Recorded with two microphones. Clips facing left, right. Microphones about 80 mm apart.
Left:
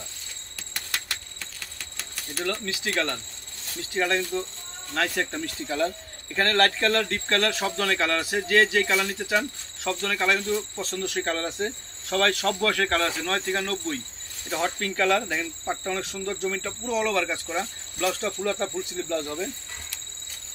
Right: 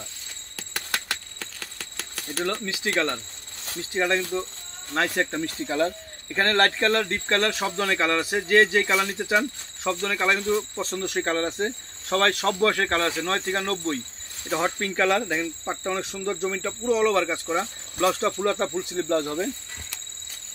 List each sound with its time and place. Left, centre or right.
1.4 s a sound: right
2.4 s speech: right
10.5 s speech: right
17.9 s speech: right